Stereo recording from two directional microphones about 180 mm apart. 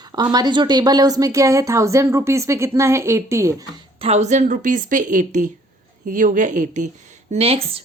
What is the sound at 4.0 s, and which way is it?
A woman's voice, 35° right (ahead or behind).